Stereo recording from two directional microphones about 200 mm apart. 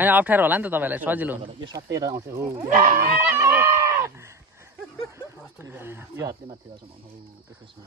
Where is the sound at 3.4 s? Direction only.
15° right (ahead or behind).